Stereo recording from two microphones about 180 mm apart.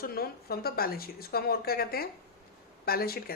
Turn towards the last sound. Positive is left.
turn(degrees=55)  # may be behind; listen again after turning